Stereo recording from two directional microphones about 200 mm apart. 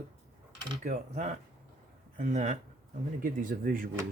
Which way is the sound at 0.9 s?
35° right (ahead or behind).